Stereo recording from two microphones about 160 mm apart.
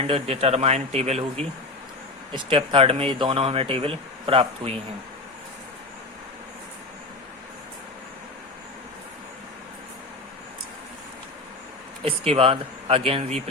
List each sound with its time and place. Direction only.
0.0 s speech: 40° right (ahead or behind)
12.3 s speech: 35° right (ahead or behind)